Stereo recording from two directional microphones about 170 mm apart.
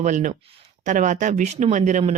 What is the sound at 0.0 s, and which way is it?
Speech, 45° right (ahead or behind).